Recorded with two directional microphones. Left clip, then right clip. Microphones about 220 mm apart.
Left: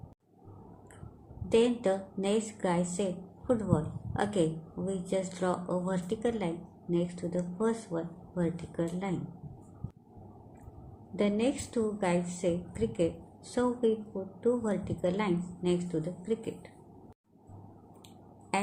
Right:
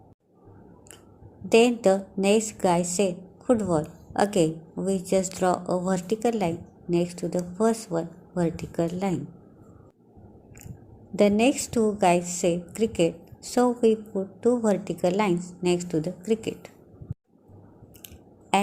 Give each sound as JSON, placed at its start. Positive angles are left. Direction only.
{"t": 1.5, "sound": "a woman's voice", "side_deg": -25}
{"t": 11.2, "sound": "a woman's voice", "side_deg": -30}